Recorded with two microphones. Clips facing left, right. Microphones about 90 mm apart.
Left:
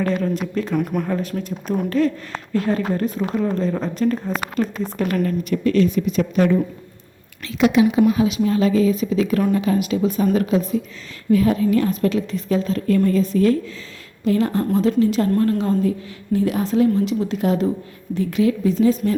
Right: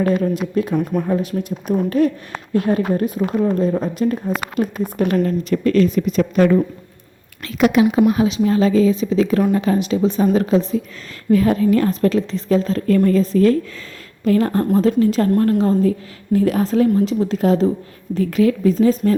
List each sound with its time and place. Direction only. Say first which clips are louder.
0.0 s a woman's voice: right 3 dB; 15° right (ahead or behind)
2.0 s a woman's voice: right 2 dB; 20° right (ahead or behind)
5.0 s a woman's voice: right 3 dB; 30° right (ahead or behind)
5.6 s a woman's voice: right 2 dB; 40° right (ahead or behind)
8.1 s a woman's voice: right 2 dB; 35° right (ahead or behind)
11.3 s a woman's voice: right 2 dB; 45° right (ahead or behind)